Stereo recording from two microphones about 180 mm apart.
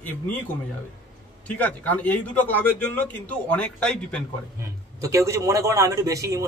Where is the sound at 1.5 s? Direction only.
10° left (ahead or behind).